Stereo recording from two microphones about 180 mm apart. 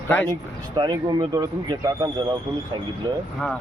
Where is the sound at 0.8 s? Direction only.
20° right (ahead or behind).